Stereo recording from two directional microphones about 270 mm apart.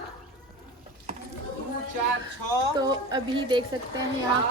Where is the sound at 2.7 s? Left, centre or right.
Centre.